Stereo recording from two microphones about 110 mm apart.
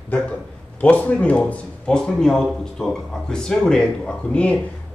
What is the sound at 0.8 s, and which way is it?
Speech, 10° left (ahead or behind).